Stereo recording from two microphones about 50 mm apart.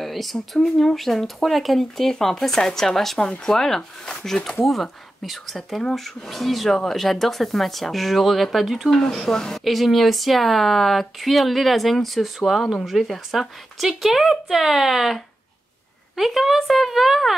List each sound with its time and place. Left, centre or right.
0.0 s speech: centre
3.2 s speech: centre
3.5 s speech: centre
9.1 s speech: centre